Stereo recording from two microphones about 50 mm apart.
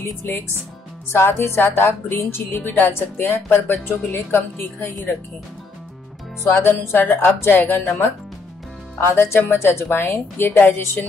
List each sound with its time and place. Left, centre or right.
1.1 s a woman's voice: left
6.6 s a woman's voice: left
8.9 s a woman's voice: left